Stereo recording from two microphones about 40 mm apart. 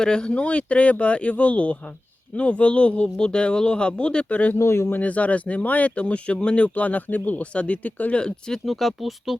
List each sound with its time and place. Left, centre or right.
0.0 s speech: left
4.3 s speech: left
4.7 s speech: left
4.9 s speech: left
6.7 s speech: left
7.5 s speech: left
8.1 s speech: left
8.6 s speech: centre